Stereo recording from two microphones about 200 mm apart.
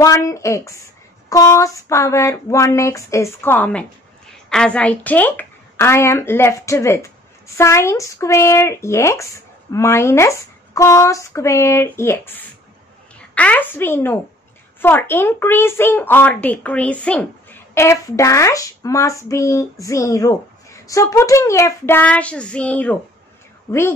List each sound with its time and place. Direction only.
0.0 s a child's voice: 15° left (ahead or behind)